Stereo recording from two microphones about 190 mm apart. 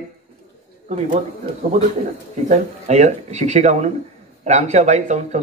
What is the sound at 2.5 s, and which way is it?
Speech, 35° right (ahead or behind).